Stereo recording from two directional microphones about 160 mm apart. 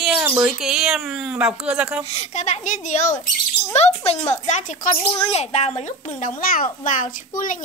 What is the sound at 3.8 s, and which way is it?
A woman's voice, 40° left (ahead or behind).